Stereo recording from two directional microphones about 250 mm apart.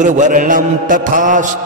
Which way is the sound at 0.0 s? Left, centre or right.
Right.